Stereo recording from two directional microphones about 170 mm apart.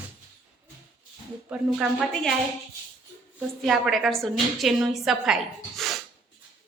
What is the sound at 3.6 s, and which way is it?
A woman's voice, centre (ahead or behind).